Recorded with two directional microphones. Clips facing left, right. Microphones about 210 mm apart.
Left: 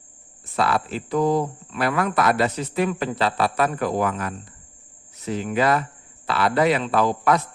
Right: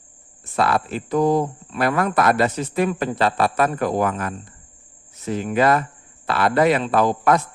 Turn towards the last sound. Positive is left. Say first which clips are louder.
# right 2 dB
turn(degrees=-45)  # may be behind; listen again after turning